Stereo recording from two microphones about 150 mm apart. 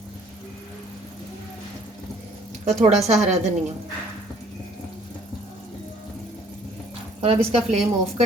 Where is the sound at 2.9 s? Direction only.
45° right (ahead or behind).